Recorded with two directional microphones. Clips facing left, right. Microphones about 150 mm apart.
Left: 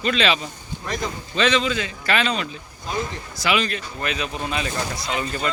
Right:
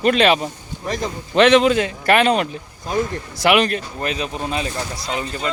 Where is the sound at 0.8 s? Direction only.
35° right (ahead or behind).